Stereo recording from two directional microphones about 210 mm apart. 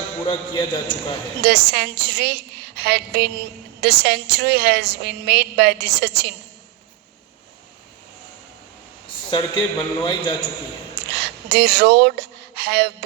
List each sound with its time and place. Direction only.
0.3 s a man's voice: 25° left (ahead or behind)
1.4 s a woman's voice: 50° right (ahead or behind)
9.3 s a man's voice: 20° left (ahead or behind)
10.9 s a sound: 50° right (ahead or behind)